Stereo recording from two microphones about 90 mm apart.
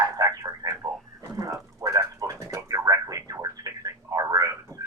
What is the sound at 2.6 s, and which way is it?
Telephone, 40° right (ahead or behind).